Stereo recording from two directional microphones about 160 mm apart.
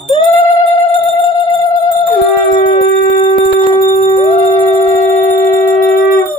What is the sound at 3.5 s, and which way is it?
Dog, 35° left (ahead or behind).